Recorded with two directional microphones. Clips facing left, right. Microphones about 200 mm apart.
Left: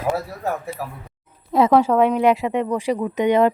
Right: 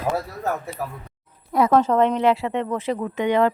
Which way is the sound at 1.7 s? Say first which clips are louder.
Left 1 dB; 10° left (ahead or behind).